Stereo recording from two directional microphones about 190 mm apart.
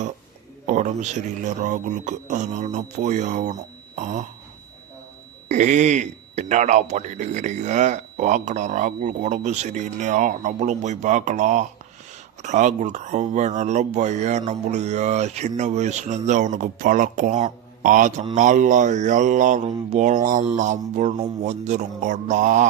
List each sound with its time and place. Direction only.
0.7 s a man's voice: 40° right (ahead or behind)
5.5 s a man's voice: 40° right (ahead or behind)